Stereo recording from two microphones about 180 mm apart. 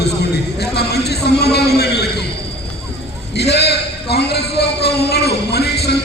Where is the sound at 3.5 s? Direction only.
65° left (ahead or behind).